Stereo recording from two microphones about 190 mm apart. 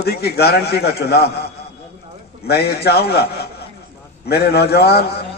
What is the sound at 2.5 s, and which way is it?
Speech, 55° left (ahead or behind).